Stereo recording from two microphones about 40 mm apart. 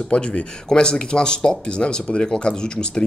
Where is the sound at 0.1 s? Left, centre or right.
Left.